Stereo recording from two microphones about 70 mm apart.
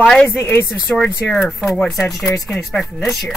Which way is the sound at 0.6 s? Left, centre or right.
Centre.